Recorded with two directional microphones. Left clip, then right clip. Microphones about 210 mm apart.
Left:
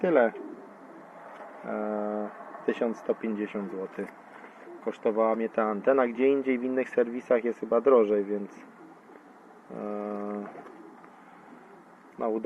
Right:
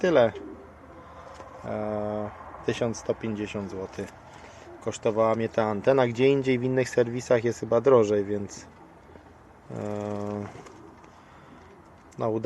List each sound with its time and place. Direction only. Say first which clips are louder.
0.0 s speech: right 2 dB; 20° right (ahead or behind)
1.7 s speech: right 1 dB; 15° right (ahead or behind); by 8.4 s 30° right (ahead or behind)
9.7 s speech: right 2 dB; 30° right (ahead or behind)